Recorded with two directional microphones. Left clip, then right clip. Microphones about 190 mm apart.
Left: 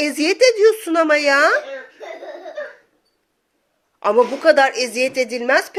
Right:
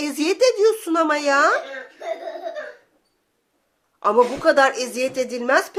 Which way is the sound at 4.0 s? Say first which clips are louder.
Left 2 dB; 10° left (ahead or behind).